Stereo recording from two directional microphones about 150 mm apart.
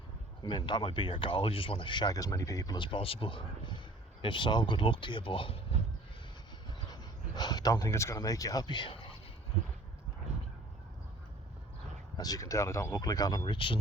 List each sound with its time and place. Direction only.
0.4 s speech: 30° left (ahead or behind)
6.7 s a sound: 25° left (ahead or behind)
12.1 s speech: 25° left (ahead or behind)